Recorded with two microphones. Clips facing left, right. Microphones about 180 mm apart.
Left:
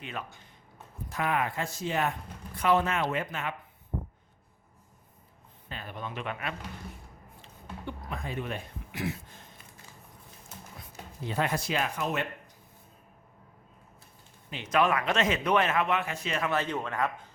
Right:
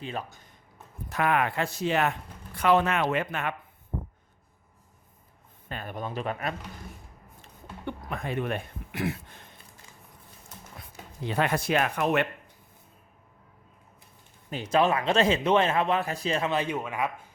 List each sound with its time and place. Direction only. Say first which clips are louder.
0.0 s speech: right 4 dB; 35° right (ahead or behind)
1.1 s speech: right 4 dB; 65° right (ahead or behind)
5.6 s speech: right 4 dB; 50° right (ahead or behind)
7.4 s a sound: right 3 dB; 60° right (ahead or behind)
11.3 s speech: right 4 dB; 70° right (ahead or behind)
14.5 s speech: right 2 dB; 35° right (ahead or behind)
16.5 s speech: right 2 dB; 15° right (ahead or behind)